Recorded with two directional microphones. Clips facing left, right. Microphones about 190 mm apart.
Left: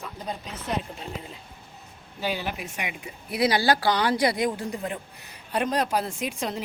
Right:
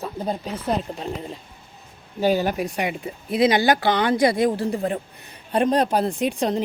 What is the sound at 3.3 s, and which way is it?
Speech, 20° right (ahead or behind).